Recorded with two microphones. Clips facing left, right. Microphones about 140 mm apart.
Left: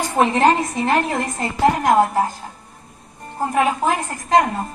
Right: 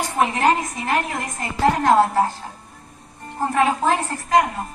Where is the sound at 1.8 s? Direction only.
15° left (ahead or behind).